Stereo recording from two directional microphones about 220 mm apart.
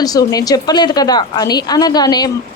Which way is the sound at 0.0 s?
15° left (ahead or behind).